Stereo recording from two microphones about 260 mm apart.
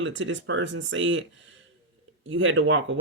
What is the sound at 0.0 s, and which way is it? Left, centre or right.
Speech, right.